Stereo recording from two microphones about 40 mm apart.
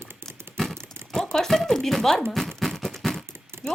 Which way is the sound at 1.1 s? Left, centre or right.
Centre.